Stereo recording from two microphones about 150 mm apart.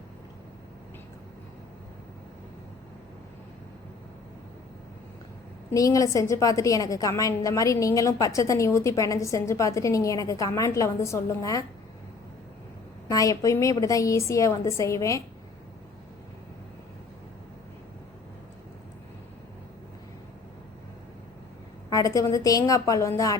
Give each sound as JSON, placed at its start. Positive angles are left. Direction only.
{"t": 5.7, "sound": "a woman's voice", "side_deg": 20}
{"t": 13.1, "sound": "a woman's voice", "side_deg": 20}
{"t": 21.8, "sound": "a woman's voice", "side_deg": 20}